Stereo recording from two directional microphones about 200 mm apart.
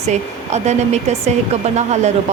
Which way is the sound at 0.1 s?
35° right (ahead or behind).